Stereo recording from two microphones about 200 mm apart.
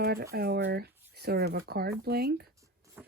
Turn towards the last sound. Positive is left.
turn(degrees=-5)  # may be behind; listen again after turning